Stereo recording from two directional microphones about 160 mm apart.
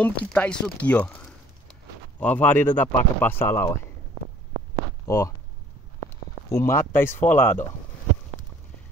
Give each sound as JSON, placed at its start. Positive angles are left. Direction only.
{"t": 0.0, "sound": "speech", "side_deg": 10}
{"t": 5.0, "sound": "speech", "side_deg": 20}
{"t": 6.5, "sound": "speech", "side_deg": 15}